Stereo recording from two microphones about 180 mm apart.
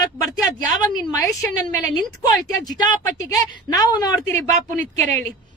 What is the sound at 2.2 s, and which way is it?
A woman's voice, 20° left (ahead or behind).